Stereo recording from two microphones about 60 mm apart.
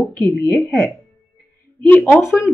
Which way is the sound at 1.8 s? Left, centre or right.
Left.